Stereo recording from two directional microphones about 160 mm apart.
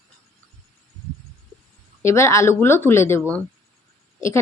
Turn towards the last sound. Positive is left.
turn(degrees=20)  # may be behind; listen again after turning